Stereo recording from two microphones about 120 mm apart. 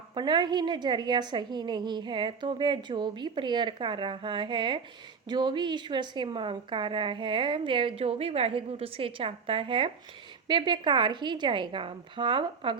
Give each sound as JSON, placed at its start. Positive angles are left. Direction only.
{"t": 0.1, "sound": "a woman's voice", "side_deg": -40}